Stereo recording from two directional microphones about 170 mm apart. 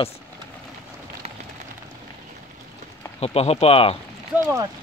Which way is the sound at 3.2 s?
40° left (ahead or behind).